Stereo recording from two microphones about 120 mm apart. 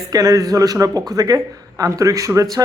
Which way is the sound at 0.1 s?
30° right (ahead or behind).